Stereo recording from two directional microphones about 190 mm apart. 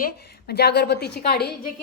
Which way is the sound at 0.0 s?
55° left (ahead or behind).